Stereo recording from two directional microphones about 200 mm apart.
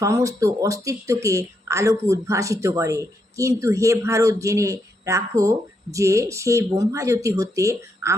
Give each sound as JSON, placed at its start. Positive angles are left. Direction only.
{"t": 0.0, "sound": "speech", "side_deg": -15}